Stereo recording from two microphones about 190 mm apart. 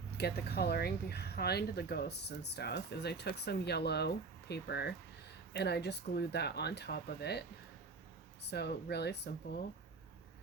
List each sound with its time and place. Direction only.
0.2 s speech: 60° left (ahead or behind)
8.4 s speech: 60° left (ahead or behind)